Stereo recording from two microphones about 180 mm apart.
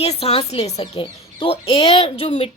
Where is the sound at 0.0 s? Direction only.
35° left (ahead or behind).